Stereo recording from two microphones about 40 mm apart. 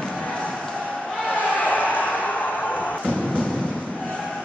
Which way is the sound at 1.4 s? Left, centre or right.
Left.